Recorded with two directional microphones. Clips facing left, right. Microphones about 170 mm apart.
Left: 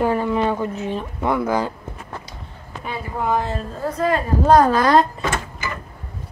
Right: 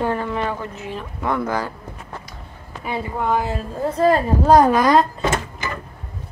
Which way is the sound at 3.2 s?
5° right (ahead or behind).